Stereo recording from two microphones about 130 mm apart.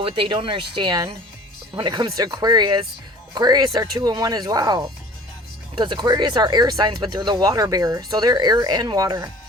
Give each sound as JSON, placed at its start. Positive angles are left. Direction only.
{"t": 0.0, "sound": "speech", "side_deg": -40}